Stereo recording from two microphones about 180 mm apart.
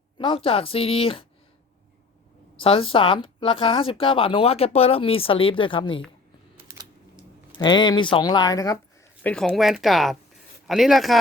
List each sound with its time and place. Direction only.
0.2 s speech: 30° left (ahead or behind)
2.6 s speech: 30° left (ahead or behind)
7.6 s speech: 25° left (ahead or behind)
9.2 s speech: 5° left (ahead or behind)